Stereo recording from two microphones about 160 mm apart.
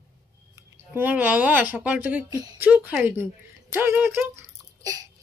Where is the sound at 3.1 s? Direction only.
15° right (ahead or behind).